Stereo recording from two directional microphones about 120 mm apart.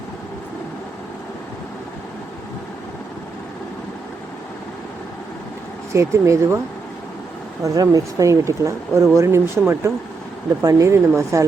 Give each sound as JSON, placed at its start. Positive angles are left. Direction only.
{"t": 5.9, "sound": "speech", "side_deg": -25}
{"t": 7.6, "sound": "speech", "side_deg": -30}